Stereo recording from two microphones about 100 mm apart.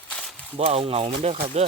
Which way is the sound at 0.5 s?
75° right (ahead or behind).